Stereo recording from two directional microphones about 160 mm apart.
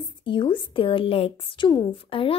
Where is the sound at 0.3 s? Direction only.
30° left (ahead or behind).